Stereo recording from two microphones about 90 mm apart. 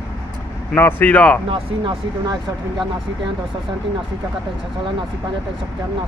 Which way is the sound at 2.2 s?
50° right (ahead or behind).